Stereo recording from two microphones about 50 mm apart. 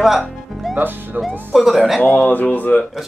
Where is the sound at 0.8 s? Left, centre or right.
Right.